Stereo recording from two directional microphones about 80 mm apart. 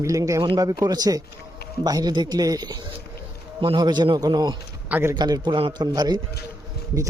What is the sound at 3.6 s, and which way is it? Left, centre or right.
A man's voice, right.